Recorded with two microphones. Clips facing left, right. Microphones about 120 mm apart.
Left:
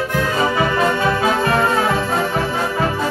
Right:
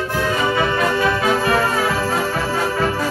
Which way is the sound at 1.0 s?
25° left (ahead or behind).